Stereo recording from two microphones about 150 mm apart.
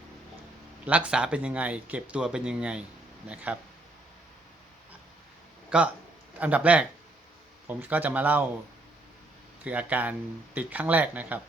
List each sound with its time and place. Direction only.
0.9 s speech: 10° right (ahead or behind)
5.7 s speech: 5° right (ahead or behind)
9.6 s speech: 10° right (ahead or behind)